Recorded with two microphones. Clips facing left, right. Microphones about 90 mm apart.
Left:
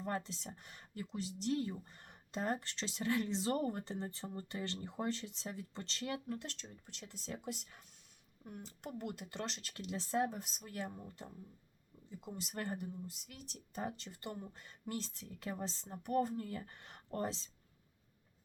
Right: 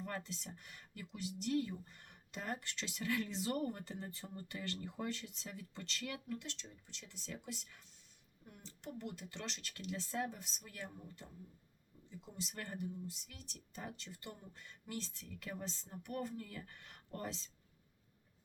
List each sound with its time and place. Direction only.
0.0 s speech: 30° left (ahead or behind)